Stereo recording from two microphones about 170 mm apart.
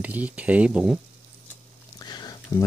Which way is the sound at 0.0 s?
10° right (ahead or behind).